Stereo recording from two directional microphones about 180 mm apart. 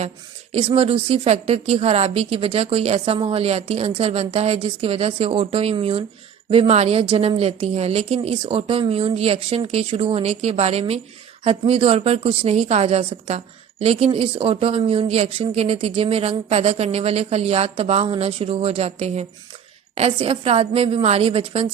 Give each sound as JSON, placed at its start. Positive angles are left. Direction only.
{"t": 0.5, "sound": "a woman's voice", "side_deg": -35}